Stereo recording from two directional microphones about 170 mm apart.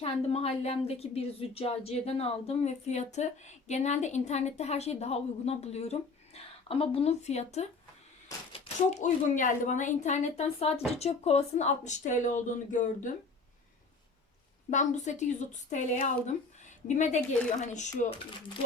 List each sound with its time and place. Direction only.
0.0 s a woman's voice: 35° left (ahead or behind)
8.9 s a woman's voice: 45° left (ahead or behind)
14.7 s a woman's voice: 45° left (ahead or behind)